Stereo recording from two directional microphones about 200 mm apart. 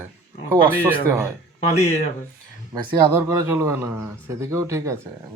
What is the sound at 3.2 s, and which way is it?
Speech, 15° right (ahead or behind).